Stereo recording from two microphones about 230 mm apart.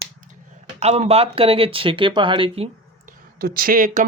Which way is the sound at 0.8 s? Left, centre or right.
Right.